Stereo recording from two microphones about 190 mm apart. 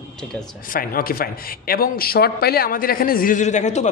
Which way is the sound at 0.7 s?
50° left (ahead or behind).